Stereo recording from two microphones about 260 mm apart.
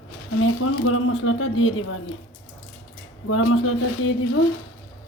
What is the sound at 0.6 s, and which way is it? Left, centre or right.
Speech, left.